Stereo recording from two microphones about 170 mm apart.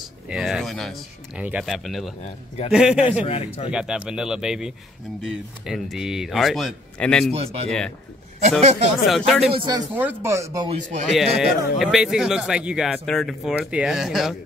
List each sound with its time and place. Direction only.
0.3 s speech: 5° right (ahead or behind)
2.2 s a man's voice: 40° left (ahead or behind)
2.7 s speech: 5° right (ahead or behind)
3.3 s a man's voice: 35° left (ahead or behind)
3.7 s speech: 5° right (ahead or behind)
7.2 s speech: 40° right (ahead or behind)
9.0 s speech: centre (ahead or behind)
9.5 s speech: 20° right (ahead or behind)
10.7 s speech: 40° right (ahead or behind)
11.1 s speech: 5° right (ahead or behind)